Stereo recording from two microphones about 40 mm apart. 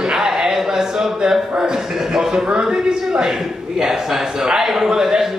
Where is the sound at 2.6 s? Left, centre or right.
Centre.